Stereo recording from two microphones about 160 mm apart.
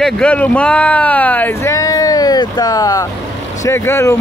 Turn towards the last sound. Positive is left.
turn(degrees=15)  # may be behind; listen again after turning